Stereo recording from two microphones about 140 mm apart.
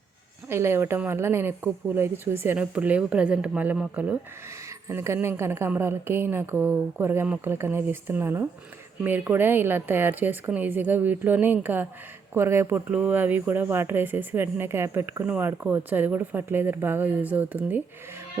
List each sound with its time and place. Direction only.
0.4 s speech: 20° right (ahead or behind)